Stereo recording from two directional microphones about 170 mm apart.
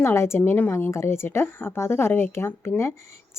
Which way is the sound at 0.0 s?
15° left (ahead or behind).